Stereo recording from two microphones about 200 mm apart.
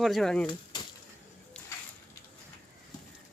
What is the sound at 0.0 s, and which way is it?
Speech, centre (ahead or behind).